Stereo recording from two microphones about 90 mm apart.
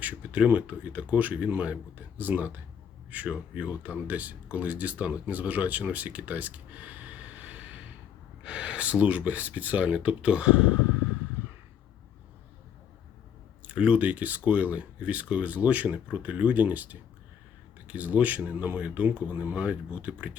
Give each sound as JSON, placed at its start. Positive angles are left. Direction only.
{"t": 0.0, "sound": "speech", "side_deg": -15}
{"t": 13.7, "sound": "speech", "side_deg": -15}